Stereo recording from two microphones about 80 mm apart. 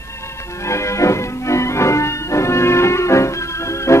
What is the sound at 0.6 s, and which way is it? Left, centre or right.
Music, left.